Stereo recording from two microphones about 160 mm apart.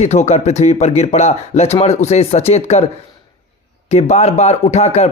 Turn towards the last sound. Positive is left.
turn(degrees=40)  # may be behind; listen again after turning